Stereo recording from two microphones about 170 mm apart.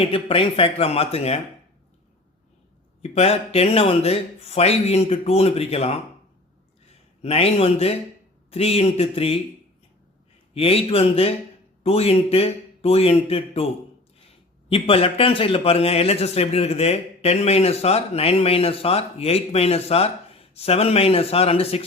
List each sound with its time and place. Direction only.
0.1 s a man's voice: 30° left (ahead or behind)
3.0 s a man's voice: 35° left (ahead or behind)
7.2 s a man's voice: 35° left (ahead or behind)
10.5 s a man's voice: 35° left (ahead or behind)